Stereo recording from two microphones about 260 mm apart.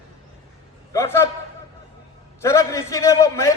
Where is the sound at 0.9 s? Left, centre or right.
Centre.